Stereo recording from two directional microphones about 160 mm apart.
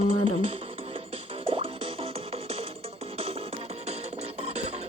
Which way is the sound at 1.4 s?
35° right (ahead or behind).